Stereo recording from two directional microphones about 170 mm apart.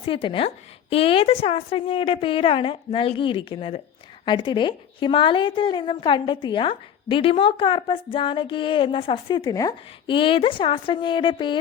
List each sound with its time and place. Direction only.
0.0 s a woman's voice: 30° left (ahead or behind)